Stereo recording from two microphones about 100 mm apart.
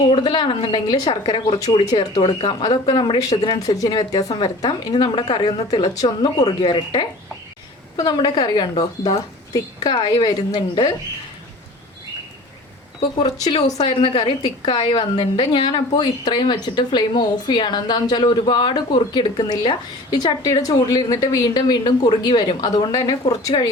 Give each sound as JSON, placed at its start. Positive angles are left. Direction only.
{"t": 0.1, "sound": "a woman's voice", "side_deg": 55}
{"t": 1.7, "sound": "speech", "side_deg": 90}
{"t": 2.6, "sound": "a woman's voice", "side_deg": 50}
{"t": 6.6, "sound": "a woman's voice", "side_deg": 55}
{"t": 13.0, "sound": "a woman's voice", "side_deg": 50}
{"t": 13.9, "sound": "a woman's voice", "side_deg": 65}